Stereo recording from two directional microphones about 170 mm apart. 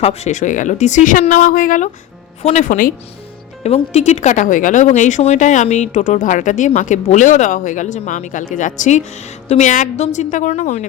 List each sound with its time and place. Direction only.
0.0 s speech: 40° left (ahead or behind); by 2.9 s 55° left (ahead or behind)
3.6 s speech: 40° left (ahead or behind)